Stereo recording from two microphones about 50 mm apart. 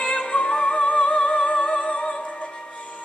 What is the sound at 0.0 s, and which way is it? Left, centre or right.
Music, centre.